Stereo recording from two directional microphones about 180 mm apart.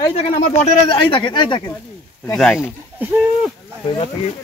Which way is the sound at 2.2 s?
5° left (ahead or behind).